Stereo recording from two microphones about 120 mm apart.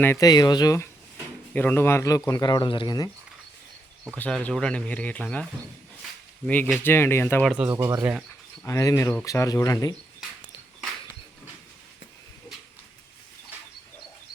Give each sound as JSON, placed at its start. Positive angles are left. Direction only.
{"t": 0.2, "sound": "speech", "side_deg": 35}
{"t": 1.5, "sound": "a man's voice", "side_deg": 15}
{"t": 4.1, "sound": "a man's voice", "side_deg": 10}
{"t": 7.4, "sound": "speech", "side_deg": -5}
{"t": 7.7, "sound": "speech", "side_deg": -25}
{"t": 8.6, "sound": "a man's voice", "side_deg": 25}